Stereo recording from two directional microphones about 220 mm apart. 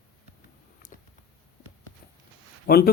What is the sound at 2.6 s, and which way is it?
Speech, 45° left (ahead or behind).